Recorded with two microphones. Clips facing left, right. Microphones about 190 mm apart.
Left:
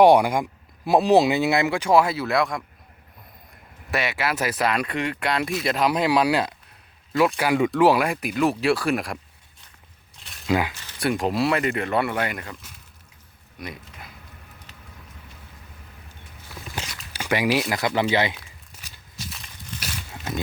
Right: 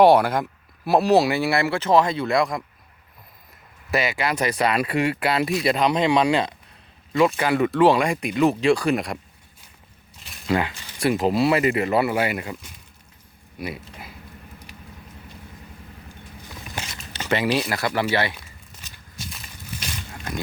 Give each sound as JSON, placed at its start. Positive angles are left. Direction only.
{"t": 0.0, "sound": "speech", "side_deg": 15}
{"t": 3.9, "sound": "speech", "side_deg": 0}
{"t": 10.4, "sound": "speech", "side_deg": 10}
{"t": 13.6, "sound": "speech", "side_deg": -5}
{"t": 17.1, "sound": "speech", "side_deg": 10}
{"t": 19.3, "sound": "a sound", "side_deg": 0}